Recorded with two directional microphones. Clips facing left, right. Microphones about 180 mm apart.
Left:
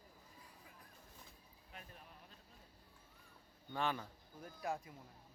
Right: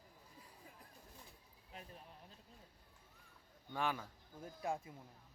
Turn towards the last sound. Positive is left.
turn(degrees=-25)  # may be behind; listen again after turning